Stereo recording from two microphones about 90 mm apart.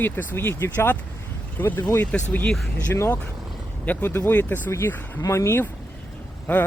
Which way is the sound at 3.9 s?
20° left (ahead or behind).